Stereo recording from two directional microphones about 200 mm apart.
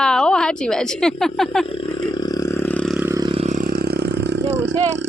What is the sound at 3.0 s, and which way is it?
Vehicle, 15° right (ahead or behind).